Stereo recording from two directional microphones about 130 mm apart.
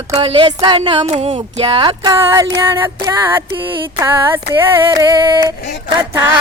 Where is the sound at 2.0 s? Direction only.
25° right (ahead or behind).